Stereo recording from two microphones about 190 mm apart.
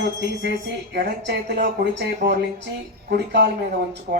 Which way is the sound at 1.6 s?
65° right (ahead or behind).